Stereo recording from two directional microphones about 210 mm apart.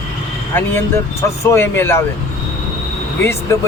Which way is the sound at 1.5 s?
10° left (ahead or behind).